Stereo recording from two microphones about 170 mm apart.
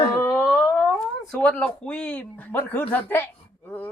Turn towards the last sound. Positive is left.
turn(degrees=10)  # may be behind; listen again after turning